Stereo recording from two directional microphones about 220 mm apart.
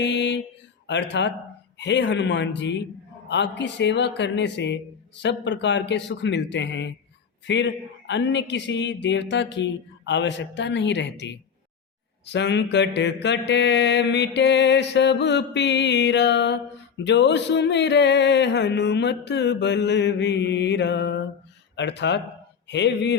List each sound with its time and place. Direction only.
0.0 s mantra: 50° left (ahead or behind)